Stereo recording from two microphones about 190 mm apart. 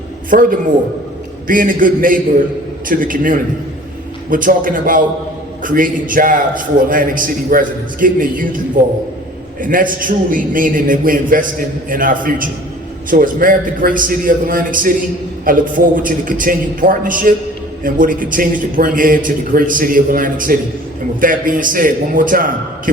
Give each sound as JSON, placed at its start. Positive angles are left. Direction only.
{"t": 0.3, "sound": "a man's voice", "side_deg": -45}